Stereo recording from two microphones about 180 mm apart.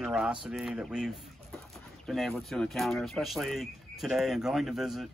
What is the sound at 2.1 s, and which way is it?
Speech, centre (ahead or behind).